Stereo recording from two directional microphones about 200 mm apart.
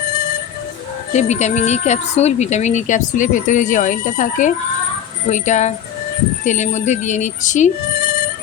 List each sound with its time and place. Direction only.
1.1 s speech: 35° left (ahead or behind)